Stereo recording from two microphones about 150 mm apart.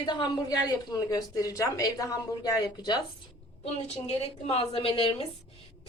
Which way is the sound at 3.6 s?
45° left (ahead or behind).